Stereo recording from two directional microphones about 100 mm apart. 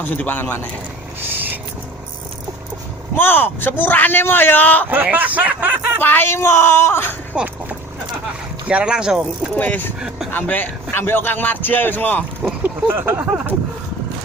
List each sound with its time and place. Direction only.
0.0 s a man's voice: 15° left (ahead or behind)
3.2 s a man's voice: 20° left (ahead or behind)
4.9 s speech: 15° right (ahead or behind)
6.0 s a man's voice: 20° left (ahead or behind)
7.3 s speech: 15° right (ahead or behind)
9.6 s a man's voice: 15° left (ahead or behind)
12.6 s a sound: 20° right (ahead or behind)